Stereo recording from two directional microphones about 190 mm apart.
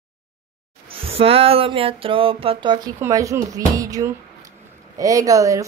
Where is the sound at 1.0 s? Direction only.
30° right (ahead or behind).